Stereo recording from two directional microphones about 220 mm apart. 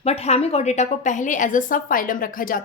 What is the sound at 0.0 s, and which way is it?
A woman's voice, 30° left (ahead or behind).